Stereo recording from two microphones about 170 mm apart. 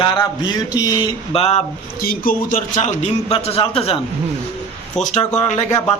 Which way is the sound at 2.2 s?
55° left (ahead or behind).